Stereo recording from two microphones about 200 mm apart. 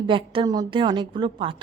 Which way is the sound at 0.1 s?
25° right (ahead or behind).